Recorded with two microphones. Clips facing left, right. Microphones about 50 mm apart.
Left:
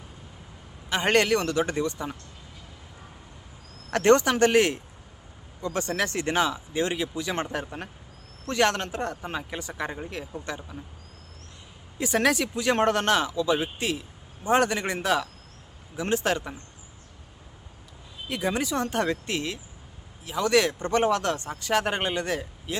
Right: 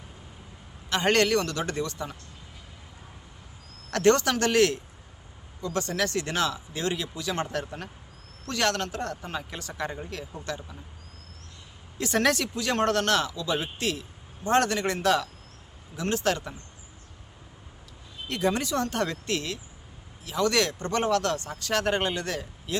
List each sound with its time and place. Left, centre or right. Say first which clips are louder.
0.9 s speech: left 1 dB; centre
3.9 s speech: left 2 dB; left
11.9 s speech: left 1 dB; centre
18.3 s speech: right 1 dB; centre